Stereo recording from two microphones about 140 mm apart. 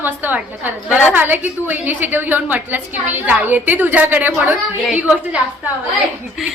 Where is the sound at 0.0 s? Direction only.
15° right (ahead or behind).